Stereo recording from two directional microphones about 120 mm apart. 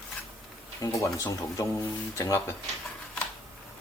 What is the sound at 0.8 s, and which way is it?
Speech, 25° left (ahead or behind).